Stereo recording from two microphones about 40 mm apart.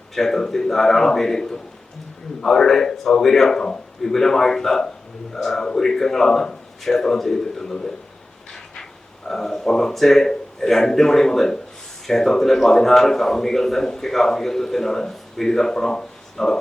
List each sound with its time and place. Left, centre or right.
0.1 s a man's voice: centre